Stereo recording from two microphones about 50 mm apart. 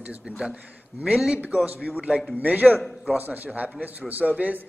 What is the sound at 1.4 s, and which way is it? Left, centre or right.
A man's voice, right.